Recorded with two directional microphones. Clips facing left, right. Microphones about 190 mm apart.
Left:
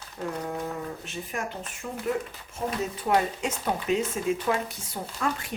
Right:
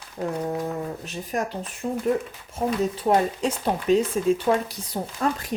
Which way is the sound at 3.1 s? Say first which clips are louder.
Right 3 dB; 35° right (ahead or behind).